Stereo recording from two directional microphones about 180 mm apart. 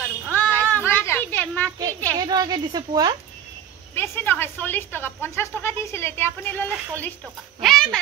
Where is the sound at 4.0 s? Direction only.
10° left (ahead or behind).